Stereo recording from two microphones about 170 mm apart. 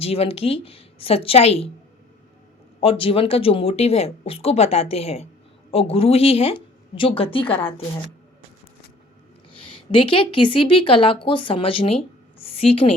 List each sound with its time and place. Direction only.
0.0 s speech: 35° left (ahead or behind)
2.8 s speech: 35° left (ahead or behind)
9.5 s speech: 30° left (ahead or behind)
12.4 s a sound: 35° left (ahead or behind)